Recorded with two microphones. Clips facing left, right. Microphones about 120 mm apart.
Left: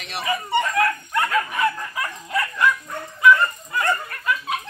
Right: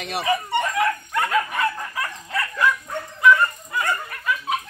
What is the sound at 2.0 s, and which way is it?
Dog, 15° left (ahead or behind).